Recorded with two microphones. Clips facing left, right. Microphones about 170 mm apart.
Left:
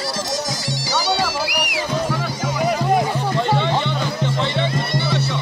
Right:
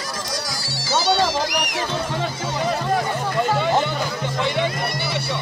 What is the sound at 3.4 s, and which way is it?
Music, 5° right (ahead or behind).